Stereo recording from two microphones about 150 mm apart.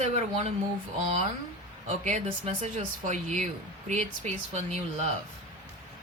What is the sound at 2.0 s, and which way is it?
Speech, 55° right (ahead or behind).